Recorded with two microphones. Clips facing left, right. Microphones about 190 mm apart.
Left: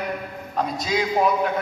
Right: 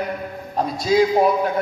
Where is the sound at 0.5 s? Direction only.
35° right (ahead or behind).